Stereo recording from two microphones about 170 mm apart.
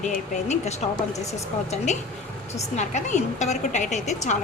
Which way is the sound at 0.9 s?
20° left (ahead or behind).